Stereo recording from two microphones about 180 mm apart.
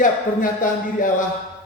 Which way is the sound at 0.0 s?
45° left (ahead or behind).